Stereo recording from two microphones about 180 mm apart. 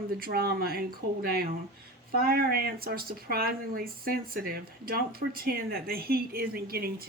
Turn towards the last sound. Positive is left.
turn(degrees=-55)  # may be behind; listen again after turning